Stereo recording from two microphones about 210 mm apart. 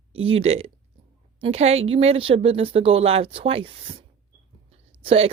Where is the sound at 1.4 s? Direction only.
30° right (ahead or behind).